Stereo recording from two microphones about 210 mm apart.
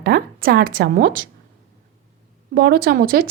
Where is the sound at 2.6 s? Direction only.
45° right (ahead or behind).